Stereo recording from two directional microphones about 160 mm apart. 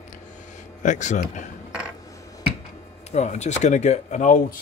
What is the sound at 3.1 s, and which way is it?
Speech, 45° left (ahead or behind).